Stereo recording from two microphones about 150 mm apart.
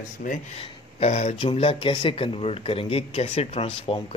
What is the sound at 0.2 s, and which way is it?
Speech, 60° left (ahead or behind).